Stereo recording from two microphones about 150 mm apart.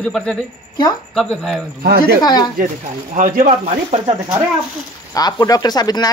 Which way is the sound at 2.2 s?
25° left (ahead or behind).